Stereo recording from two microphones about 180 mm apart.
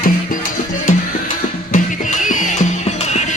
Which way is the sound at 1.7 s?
45° left (ahead or behind).